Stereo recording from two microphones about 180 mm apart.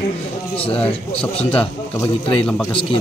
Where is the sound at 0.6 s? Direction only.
30° left (ahead or behind).